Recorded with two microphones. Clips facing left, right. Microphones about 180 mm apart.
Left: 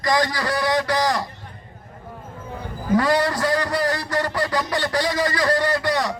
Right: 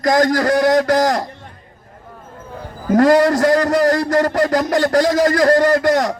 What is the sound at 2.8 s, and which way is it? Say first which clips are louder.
A man's voice: right 7 dB; 45° right (ahead or behind).